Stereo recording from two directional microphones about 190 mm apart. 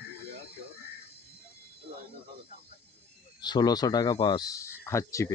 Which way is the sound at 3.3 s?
25° left (ahead or behind).